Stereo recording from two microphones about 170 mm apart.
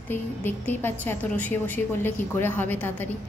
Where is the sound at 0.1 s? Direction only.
10° left (ahead or behind).